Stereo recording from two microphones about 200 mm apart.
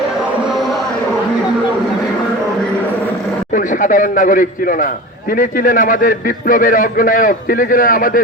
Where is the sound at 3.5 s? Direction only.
40° left (ahead or behind).